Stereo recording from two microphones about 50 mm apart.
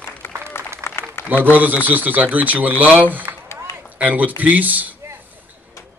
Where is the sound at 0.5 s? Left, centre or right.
Left.